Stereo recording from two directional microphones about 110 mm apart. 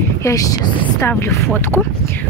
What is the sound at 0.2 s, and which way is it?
Speech, 30° left (ahead or behind).